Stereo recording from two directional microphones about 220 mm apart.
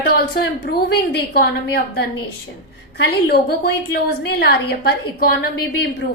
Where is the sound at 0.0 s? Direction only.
45° left (ahead or behind).